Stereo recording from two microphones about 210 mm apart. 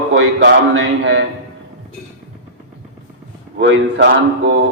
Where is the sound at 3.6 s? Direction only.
60° right (ahead or behind).